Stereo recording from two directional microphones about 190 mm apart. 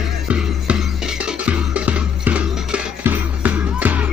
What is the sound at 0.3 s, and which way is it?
Music, 5° right (ahead or behind).